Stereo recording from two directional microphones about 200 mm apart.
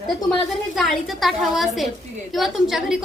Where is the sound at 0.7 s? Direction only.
Centre (ahead or behind).